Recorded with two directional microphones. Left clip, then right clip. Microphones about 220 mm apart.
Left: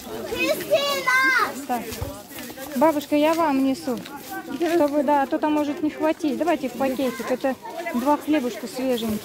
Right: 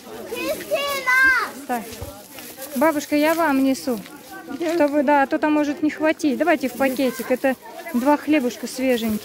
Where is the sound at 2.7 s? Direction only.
30° right (ahead or behind).